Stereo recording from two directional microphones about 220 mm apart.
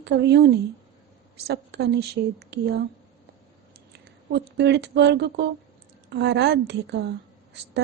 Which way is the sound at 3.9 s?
50° right (ahead or behind).